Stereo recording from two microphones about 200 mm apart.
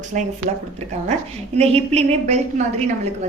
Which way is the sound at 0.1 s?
40° right (ahead or behind).